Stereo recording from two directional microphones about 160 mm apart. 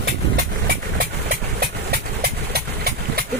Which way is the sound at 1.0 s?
75° right (ahead or behind).